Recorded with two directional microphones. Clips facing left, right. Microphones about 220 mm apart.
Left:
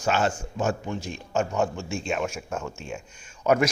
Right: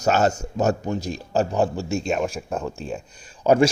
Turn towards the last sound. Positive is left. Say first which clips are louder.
# right 5 dB
turn(degrees=-30)  # may be behind; listen again after turning